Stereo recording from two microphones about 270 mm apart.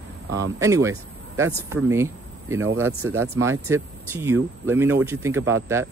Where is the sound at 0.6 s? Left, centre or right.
Centre.